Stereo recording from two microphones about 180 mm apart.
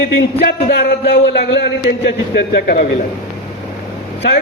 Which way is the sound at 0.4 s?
65° left (ahead or behind).